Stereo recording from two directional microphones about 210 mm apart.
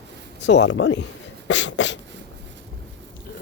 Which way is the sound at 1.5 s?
60° left (ahead or behind).